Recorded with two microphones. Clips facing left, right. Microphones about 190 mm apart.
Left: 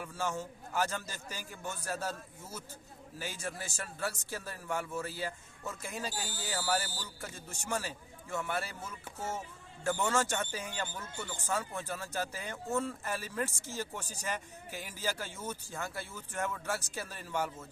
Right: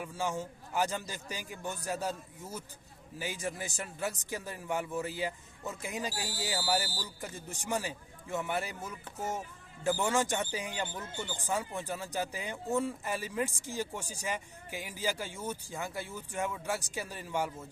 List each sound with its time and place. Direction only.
0.0 s speech: 15° right (ahead or behind)
10.0 s speech: 15° right (ahead or behind)